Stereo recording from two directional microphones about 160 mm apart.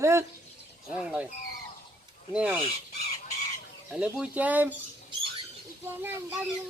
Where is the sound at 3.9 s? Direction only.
5° right (ahead or behind).